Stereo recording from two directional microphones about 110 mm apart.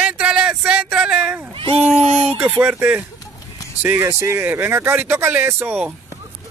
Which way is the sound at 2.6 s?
15° right (ahead or behind).